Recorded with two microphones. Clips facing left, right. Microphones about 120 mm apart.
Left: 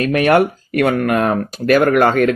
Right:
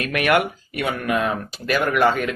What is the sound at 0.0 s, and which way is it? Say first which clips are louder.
Speech: left 6 dB; 35° left (ahead or behind).